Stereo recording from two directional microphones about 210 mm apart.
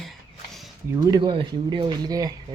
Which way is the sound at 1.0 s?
20° right (ahead or behind).